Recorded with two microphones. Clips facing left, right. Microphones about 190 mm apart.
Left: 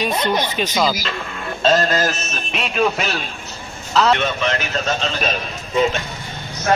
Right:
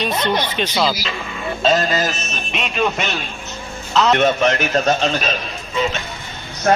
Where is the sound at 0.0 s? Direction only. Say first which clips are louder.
Even; 10° left (ahead or behind).